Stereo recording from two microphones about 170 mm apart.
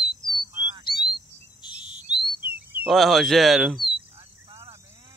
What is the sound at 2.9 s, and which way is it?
Speech, centre (ahead or behind).